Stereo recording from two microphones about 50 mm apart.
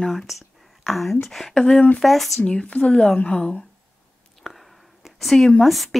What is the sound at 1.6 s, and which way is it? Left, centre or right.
Speech, centre.